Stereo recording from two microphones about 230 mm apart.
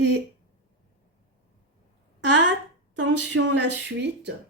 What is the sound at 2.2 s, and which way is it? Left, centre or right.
Speech, right.